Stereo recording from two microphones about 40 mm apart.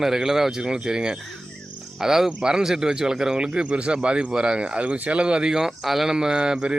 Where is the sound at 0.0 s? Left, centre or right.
Centre; by 5.2 s right.